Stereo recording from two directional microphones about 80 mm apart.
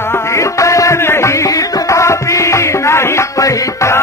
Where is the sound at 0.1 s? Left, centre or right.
Left.